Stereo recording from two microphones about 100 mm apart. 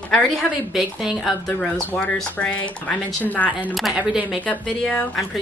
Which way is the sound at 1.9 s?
15° left (ahead or behind).